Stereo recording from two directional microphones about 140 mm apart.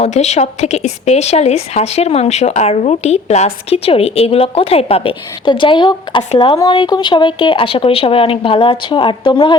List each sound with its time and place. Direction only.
0.0 s a woman's voice: 55° left (ahead or behind); by 9.6 s 35° left (ahead or behind)